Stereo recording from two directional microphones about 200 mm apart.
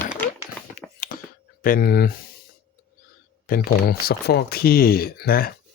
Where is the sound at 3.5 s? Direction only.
45° left (ahead or behind).